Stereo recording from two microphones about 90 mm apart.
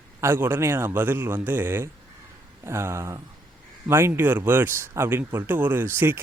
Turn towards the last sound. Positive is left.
turn(degrees=-25)  # may be behind; listen again after turning